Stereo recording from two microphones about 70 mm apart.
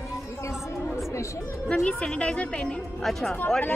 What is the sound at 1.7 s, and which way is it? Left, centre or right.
A woman's voice, centre.